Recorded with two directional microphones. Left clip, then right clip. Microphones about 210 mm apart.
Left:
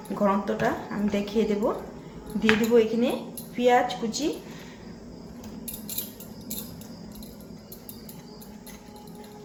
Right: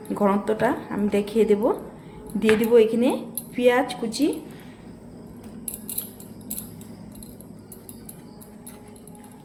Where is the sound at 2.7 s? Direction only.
40° right (ahead or behind).